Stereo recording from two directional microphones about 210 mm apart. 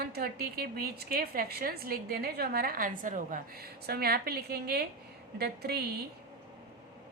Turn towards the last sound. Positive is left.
turn(degrees=-50)  # may be behind; listen again after turning